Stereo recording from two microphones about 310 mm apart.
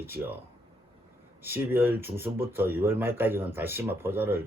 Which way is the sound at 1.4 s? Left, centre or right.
Centre.